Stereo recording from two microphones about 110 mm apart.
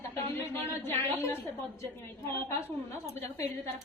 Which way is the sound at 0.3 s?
20° left (ahead or behind).